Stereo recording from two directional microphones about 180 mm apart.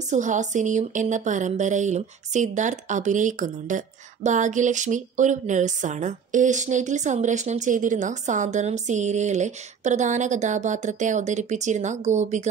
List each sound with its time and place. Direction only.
0.1 s speech: 45° right (ahead or behind)